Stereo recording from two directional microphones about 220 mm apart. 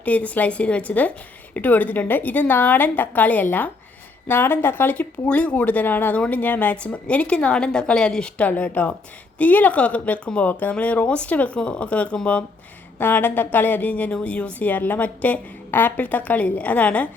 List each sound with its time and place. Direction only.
0.0 s speech: 5° left (ahead or behind)